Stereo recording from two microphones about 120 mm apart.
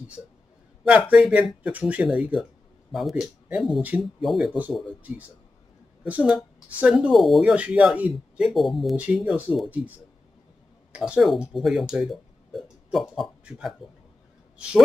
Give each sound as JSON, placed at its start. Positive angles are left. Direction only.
{"t": 1.1, "sound": "speech", "side_deg": -10}
{"t": 2.0, "sound": "speech", "side_deg": 0}
{"t": 6.0, "sound": "speech", "side_deg": -10}
{"t": 7.5, "sound": "speech", "side_deg": -10}
{"t": 8.9, "sound": "speech", "side_deg": -10}